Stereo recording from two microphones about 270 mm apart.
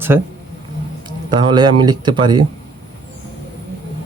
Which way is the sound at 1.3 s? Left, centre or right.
Centre.